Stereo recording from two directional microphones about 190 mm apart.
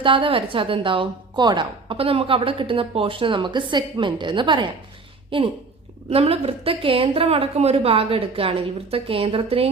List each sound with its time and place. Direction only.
0.0 s speech: 25° right (ahead or behind)
6.1 s speech: 30° right (ahead or behind)